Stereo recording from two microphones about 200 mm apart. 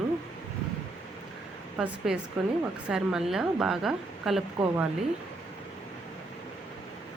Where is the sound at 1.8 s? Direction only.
5° right (ahead or behind).